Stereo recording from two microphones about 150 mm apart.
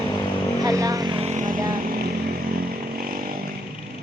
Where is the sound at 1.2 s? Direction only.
50° right (ahead or behind).